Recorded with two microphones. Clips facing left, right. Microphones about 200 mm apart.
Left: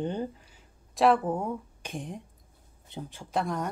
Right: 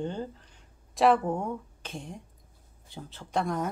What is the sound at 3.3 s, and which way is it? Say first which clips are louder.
Speech: right 1 dB; centre (ahead or behind).